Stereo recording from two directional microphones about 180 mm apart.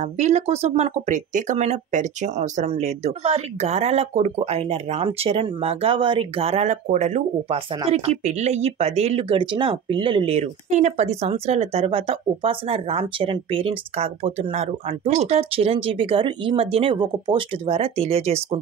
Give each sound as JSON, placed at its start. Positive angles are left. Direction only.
{"t": 0.0, "sound": "speech", "side_deg": -40}